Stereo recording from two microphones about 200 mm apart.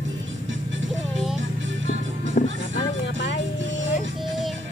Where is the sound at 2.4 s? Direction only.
50° left (ahead or behind).